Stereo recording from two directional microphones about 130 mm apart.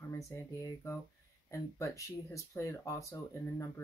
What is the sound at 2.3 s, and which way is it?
Speech, 25° left (ahead or behind).